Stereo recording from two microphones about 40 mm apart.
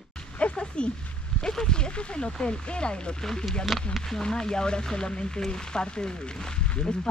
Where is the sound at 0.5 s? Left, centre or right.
Left.